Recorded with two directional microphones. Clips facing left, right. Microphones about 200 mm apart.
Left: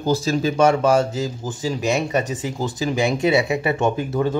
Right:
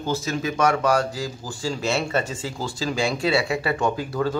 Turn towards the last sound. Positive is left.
turn(degrees=20)  # may be behind; listen again after turning